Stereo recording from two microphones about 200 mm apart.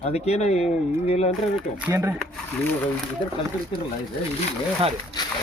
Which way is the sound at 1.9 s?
15° right (ahead or behind).